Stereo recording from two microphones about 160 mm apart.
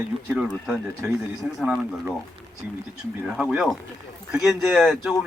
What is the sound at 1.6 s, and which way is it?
Speech, 5° right (ahead or behind).